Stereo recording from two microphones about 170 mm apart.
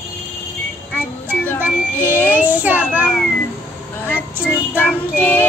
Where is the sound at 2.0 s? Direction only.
10° left (ahead or behind).